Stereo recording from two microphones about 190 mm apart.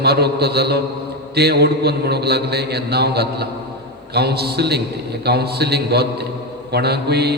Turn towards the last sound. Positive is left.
turn(degrees=-60)  # may be behind; listen again after turning